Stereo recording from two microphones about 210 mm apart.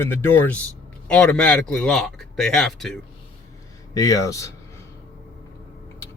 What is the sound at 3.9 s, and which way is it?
Speech, 15° left (ahead or behind).